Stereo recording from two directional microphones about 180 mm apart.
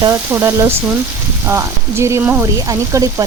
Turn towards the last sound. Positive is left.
turn(degrees=-15)  # may be behind; listen again after turning